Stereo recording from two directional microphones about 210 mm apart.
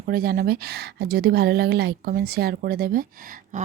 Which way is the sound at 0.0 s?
45° right (ahead or behind).